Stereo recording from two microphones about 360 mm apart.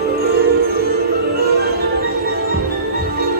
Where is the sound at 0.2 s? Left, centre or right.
Right.